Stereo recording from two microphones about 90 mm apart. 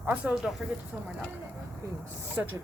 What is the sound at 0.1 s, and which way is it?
Speech, 15° right (ahead or behind).